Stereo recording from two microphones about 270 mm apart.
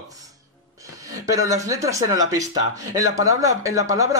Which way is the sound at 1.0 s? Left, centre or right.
Centre.